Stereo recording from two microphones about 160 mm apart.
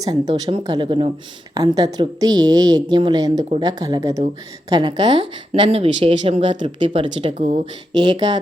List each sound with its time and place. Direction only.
0.0 s a woman's voice: 25° right (ahead or behind); by 7.6 s 45° right (ahead or behind)
7.9 s a woman's voice: 25° right (ahead or behind)